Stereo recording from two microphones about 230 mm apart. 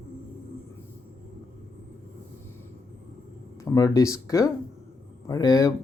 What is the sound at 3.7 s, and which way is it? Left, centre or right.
Speech, centre.